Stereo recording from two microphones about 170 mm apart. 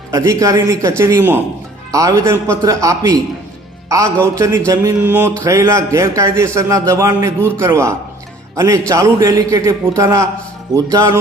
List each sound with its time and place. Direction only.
0.1 s a man's voice: 20° right (ahead or behind)